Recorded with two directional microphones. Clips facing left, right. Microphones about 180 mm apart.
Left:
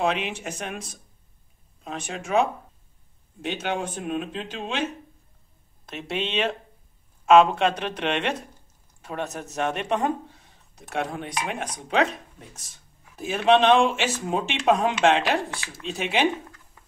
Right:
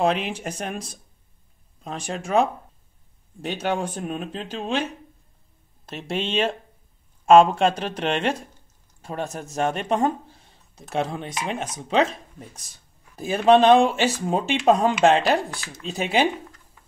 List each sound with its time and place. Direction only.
0.0 s speech: 35° right (ahead or behind)
1.9 s speech: 35° right (ahead or behind)
3.4 s speech: 40° right (ahead or behind)
6.0 s speech: 40° right (ahead or behind)